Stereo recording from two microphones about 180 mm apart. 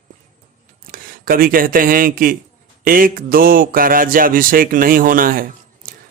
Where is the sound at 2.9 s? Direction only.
50° right (ahead or behind).